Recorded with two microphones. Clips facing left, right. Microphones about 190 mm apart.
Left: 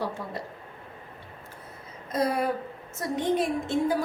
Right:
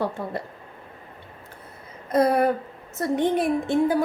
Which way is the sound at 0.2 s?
55° right (ahead or behind).